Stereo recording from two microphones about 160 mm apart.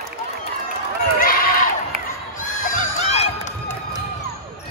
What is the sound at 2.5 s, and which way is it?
Crowd, 55° left (ahead or behind).